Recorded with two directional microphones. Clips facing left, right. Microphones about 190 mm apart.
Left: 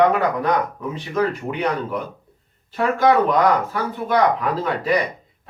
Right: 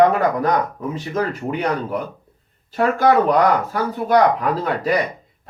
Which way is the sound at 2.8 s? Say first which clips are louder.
Right 1 dB; 40° right (ahead or behind).